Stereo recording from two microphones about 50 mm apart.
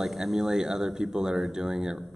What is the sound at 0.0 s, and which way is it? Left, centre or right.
A man's voice, centre.